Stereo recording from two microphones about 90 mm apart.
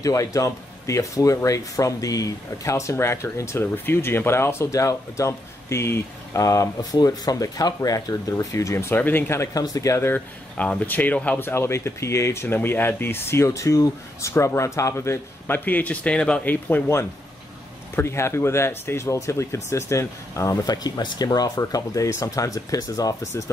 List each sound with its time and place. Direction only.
0.0 s speech: 40° left (ahead or behind)
9.5 s speech: 40° left (ahead or behind)
10.1 s speech: 20° left (ahead or behind); by 20.5 s 35° left (ahead or behind)
20.6 s speech: 45° left (ahead or behind)